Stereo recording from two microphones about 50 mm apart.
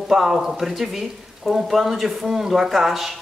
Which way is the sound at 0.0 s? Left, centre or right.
Centre.